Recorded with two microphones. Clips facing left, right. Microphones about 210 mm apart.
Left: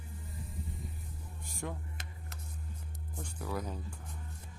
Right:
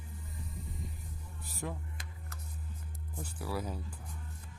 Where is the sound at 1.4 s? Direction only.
Centre (ahead or behind).